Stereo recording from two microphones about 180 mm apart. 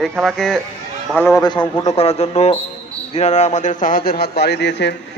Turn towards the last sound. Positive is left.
turn(degrees=75)  # may be behind; listen again after turning